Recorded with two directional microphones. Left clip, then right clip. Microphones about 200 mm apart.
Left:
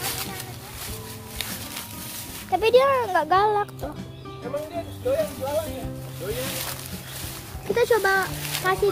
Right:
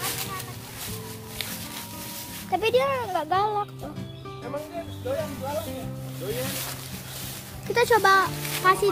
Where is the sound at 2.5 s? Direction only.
15° left (ahead or behind); by 3.9 s 30° left (ahead or behind).